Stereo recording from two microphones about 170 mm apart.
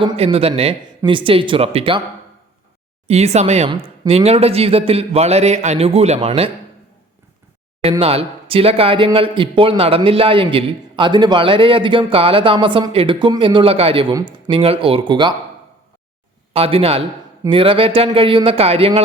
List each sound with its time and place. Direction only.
0.0 s speech: 35° right (ahead or behind)
3.1 s speech: 40° right (ahead or behind)
7.8 s speech: 35° right (ahead or behind)
16.5 s a man's voice: 35° right (ahead or behind)